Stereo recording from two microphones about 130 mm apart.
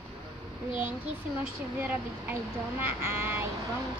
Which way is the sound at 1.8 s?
15° right (ahead or behind).